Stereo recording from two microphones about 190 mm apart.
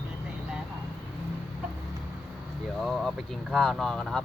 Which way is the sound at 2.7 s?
Centre (ahead or behind).